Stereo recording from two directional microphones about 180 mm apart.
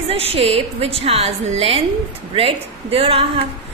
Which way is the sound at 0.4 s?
35° right (ahead or behind).